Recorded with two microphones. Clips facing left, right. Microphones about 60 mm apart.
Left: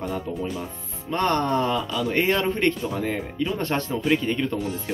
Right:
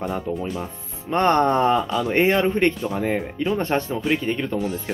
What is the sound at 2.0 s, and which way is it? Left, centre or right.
Speech, right.